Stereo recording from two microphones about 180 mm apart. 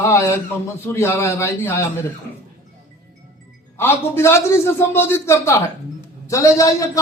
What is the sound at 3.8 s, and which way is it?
A man's voice, 15° left (ahead or behind).